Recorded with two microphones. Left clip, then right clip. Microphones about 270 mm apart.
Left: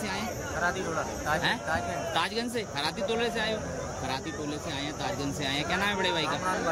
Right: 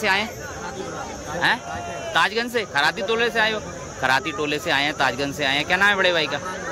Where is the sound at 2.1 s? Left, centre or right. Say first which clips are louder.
Right 12 dB; centre.